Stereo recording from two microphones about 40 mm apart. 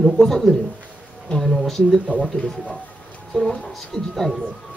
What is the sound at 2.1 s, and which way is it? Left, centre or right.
Speech, right.